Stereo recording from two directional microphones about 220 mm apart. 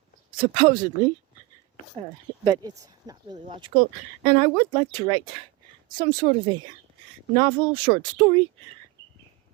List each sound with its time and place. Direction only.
0.3 s speech: 25° right (ahead or behind)
2.4 s speech: 20° right (ahead or behind)